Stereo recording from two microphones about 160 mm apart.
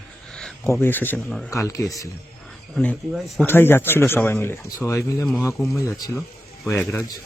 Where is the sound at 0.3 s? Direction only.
5° left (ahead or behind).